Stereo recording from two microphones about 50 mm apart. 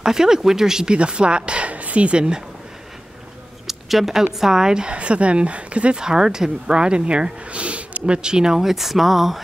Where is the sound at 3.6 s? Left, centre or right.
Centre.